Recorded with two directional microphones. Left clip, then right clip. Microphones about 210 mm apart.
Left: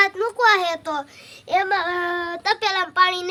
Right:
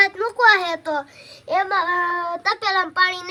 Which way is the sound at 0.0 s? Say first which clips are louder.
Right 2 dB; 10° left (ahead or behind).